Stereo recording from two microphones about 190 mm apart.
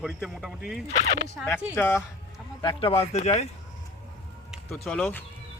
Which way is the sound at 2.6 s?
25° left (ahead or behind).